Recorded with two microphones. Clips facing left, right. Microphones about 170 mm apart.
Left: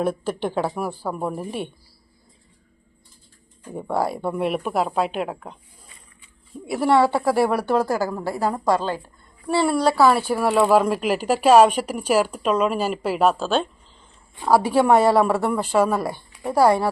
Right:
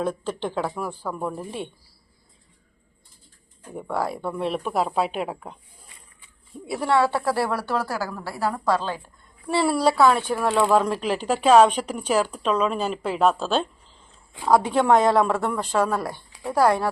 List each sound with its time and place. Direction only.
0.0 s speech: 10° left (ahead or behind)
3.8 s speech: 15° left (ahead or behind); by 5.5 s 5° right (ahead or behind)
6.8 s speech: 10° left (ahead or behind)
9.5 s speech: 5° right (ahead or behind)